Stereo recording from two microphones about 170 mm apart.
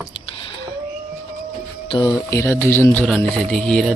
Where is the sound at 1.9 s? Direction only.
25° left (ahead or behind).